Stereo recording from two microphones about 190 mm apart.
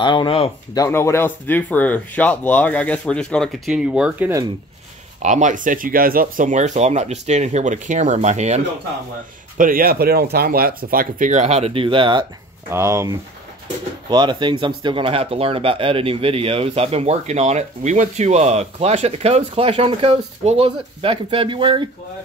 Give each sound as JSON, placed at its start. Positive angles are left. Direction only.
{"t": 0.0, "sound": "speech", "side_deg": 25}
{"t": 0.7, "sound": "speech", "side_deg": 15}
{"t": 5.2, "sound": "speech", "side_deg": -40}
{"t": 9.6, "sound": "speech", "side_deg": -50}
{"t": 12.6, "sound": "speech", "side_deg": -15}